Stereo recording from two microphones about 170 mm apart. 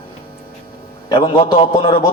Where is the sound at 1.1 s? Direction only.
25° left (ahead or behind).